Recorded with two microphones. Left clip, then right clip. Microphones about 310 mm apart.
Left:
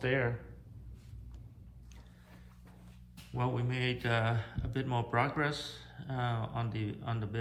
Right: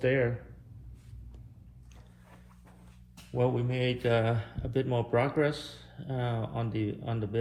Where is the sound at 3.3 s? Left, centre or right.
Centre.